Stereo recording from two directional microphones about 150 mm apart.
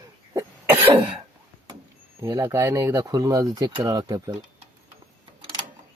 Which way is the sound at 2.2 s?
20° right (ahead or behind).